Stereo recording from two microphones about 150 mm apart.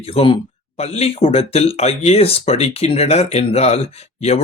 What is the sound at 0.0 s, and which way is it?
Speech, 40° left (ahead or behind).